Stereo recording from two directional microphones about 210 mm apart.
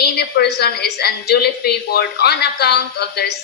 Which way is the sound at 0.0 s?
50° left (ahead or behind).